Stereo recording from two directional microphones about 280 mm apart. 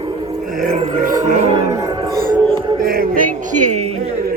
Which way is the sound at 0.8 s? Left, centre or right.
Right.